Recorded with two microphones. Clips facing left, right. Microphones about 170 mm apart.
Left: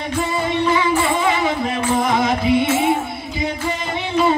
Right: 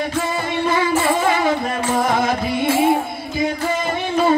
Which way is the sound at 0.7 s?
45° right (ahead or behind).